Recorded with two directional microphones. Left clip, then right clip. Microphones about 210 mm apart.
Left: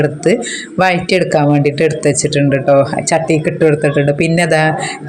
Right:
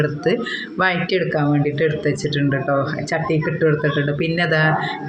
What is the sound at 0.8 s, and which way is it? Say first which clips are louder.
Speech: left 7 dB; 35° left (ahead or behind).